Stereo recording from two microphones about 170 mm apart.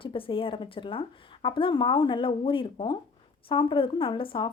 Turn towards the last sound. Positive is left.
turn(degrees=30)  # may be behind; listen again after turning